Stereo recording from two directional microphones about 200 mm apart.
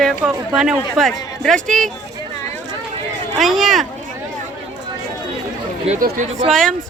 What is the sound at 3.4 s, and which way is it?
Speech, centre (ahead or behind).